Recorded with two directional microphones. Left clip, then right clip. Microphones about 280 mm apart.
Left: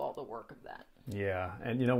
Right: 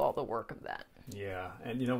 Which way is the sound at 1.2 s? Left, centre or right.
Left.